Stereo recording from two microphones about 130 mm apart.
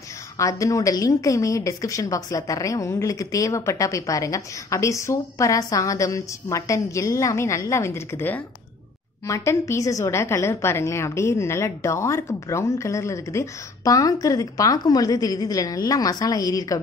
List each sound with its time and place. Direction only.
0.4 s a woman's voice: 25° left (ahead or behind)